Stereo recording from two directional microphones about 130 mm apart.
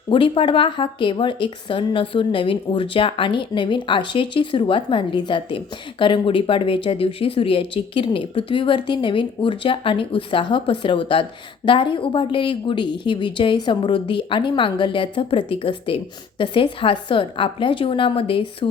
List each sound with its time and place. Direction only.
0.1 s speech: 40° left (ahead or behind)